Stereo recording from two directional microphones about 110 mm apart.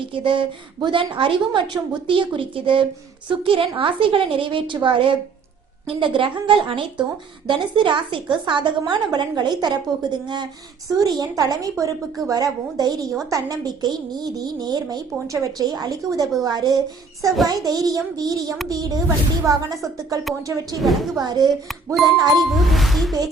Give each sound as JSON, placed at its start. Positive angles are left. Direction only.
{"t": 0.1, "sound": "a woman's voice", "side_deg": -50}
{"t": 20.7, "sound": "speech", "side_deg": 0}
{"t": 21.2, "sound": "a woman's voice", "side_deg": -40}
{"t": 22.4, "sound": "speech", "side_deg": 0}